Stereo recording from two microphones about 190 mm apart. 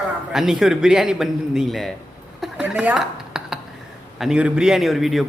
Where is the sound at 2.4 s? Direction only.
5° right (ahead or behind).